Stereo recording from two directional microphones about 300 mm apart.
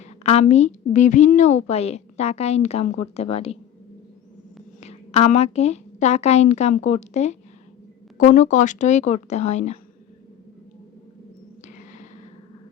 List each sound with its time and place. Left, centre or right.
0.0 s a woman's voice: left
4.8 s a woman's voice: left